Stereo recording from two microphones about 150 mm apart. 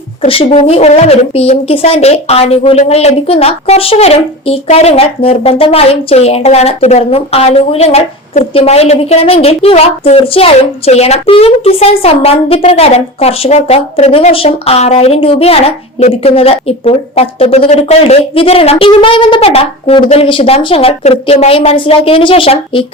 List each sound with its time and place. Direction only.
0.3 s a woman's voice: 40° left (ahead or behind)